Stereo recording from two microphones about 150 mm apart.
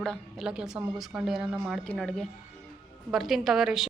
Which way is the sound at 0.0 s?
Centre (ahead or behind).